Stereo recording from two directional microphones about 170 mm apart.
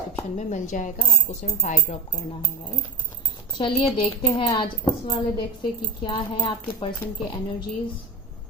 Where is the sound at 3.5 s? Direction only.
30° left (ahead or behind).